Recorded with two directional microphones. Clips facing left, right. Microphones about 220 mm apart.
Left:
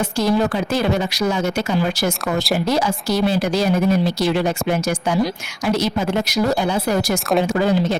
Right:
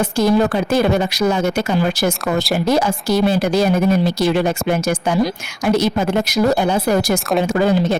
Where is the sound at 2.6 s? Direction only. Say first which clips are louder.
Right 3 dB; 50° right (ahead or behind).